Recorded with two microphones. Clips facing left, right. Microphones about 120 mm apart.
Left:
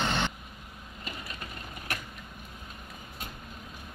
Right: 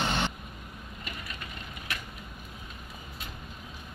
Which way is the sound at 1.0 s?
30° left (ahead or behind).